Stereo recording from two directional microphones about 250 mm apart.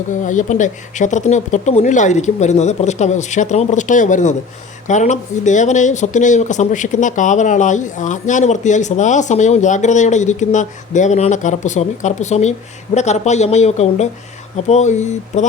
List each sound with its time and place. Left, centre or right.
0.1 s speech: left